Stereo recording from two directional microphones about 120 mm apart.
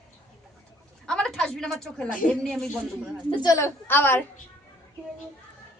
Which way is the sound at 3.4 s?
25° left (ahead or behind).